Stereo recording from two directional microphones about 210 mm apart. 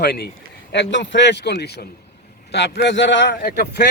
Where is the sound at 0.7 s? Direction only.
60° left (ahead or behind).